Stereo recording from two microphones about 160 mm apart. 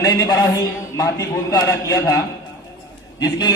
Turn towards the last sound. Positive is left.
turn(degrees=25)  # may be behind; listen again after turning